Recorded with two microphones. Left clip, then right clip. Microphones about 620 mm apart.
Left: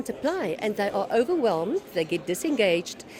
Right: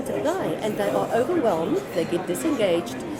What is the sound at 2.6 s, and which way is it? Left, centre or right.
Speech, left.